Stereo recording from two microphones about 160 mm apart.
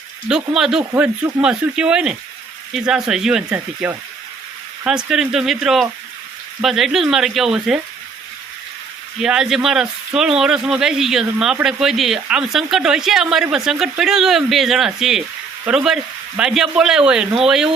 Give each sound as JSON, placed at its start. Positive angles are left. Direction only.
{"t": 0.3, "sound": "speech", "side_deg": -5}
{"t": 9.2, "sound": "speech", "side_deg": -5}